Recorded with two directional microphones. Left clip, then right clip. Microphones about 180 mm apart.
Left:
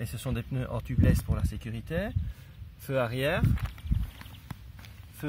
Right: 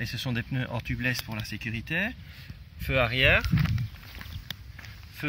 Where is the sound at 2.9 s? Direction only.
Centre (ahead or behind).